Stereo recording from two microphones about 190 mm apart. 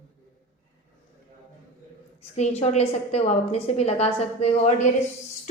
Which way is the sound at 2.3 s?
35° left (ahead or behind).